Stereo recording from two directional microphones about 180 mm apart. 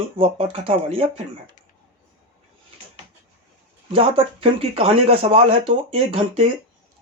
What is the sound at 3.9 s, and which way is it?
Speech, 35° right (ahead or behind).